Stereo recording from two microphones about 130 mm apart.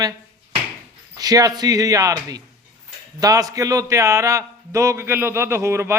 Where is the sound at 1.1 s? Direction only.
30° right (ahead or behind).